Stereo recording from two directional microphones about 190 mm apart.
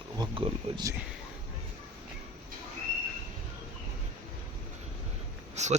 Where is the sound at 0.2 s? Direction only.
25° right (ahead or behind).